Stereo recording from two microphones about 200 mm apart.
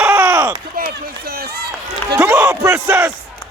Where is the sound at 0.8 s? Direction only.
45° right (ahead or behind).